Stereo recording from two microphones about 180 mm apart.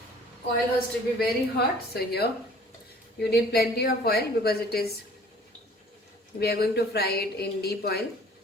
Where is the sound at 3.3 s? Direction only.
60° left (ahead or behind).